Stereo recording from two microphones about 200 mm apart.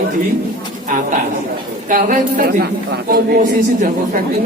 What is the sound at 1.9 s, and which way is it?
Speech, 45° right (ahead or behind).